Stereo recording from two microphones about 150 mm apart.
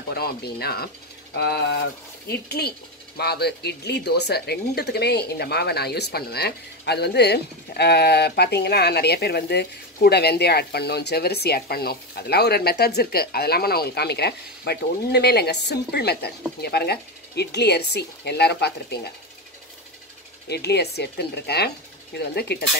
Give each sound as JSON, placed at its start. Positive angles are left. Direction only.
{"t": 0.1, "sound": "speech", "side_deg": 90}
{"t": 20.4, "sound": "speech", "side_deg": 90}